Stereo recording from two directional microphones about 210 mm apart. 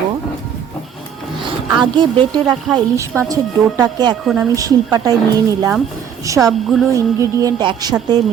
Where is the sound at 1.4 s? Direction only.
20° right (ahead or behind).